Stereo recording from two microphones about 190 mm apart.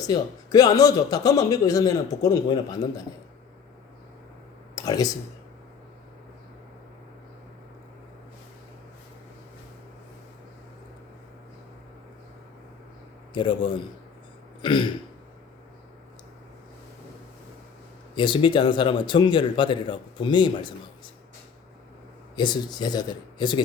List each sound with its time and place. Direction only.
0.1 s a man's voice: 20° left (ahead or behind)
4.7 s a sound: 20° left (ahead or behind)
13.3 s a man's voice: 25° left (ahead or behind)
14.6 s throat clearing: 25° left (ahead or behind)
18.1 s a man's voice: 25° left (ahead or behind)
22.4 s a man's voice: 25° left (ahead or behind)